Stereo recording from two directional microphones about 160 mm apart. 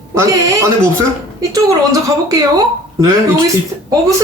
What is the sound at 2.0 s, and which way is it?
Speech, 20° right (ahead or behind).